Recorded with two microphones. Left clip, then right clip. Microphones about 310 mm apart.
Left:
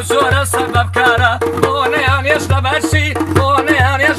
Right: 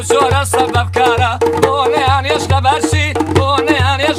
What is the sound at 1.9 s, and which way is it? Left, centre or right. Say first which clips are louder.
Music: right 1 dB; centre.